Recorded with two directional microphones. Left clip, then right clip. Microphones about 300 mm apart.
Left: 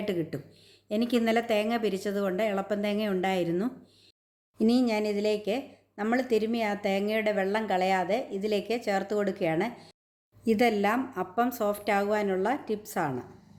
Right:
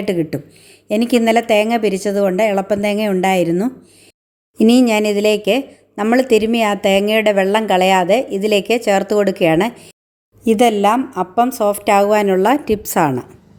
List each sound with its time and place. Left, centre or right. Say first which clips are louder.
0.0 s speech: right 12 dB; right